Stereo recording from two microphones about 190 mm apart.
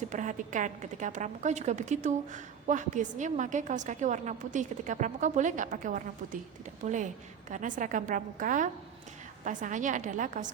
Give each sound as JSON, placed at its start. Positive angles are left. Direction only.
{"t": 0.1, "sound": "a woman's voice", "side_deg": -40}